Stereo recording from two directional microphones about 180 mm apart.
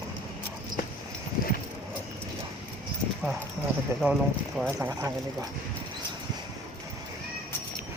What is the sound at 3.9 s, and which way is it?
Speech, 15° right (ahead or behind).